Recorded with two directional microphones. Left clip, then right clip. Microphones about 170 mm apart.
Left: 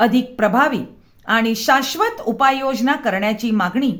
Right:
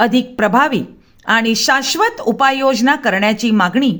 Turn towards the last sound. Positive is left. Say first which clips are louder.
# right 5 dB
turn(degrees=-30)  # may be behind; listen again after turning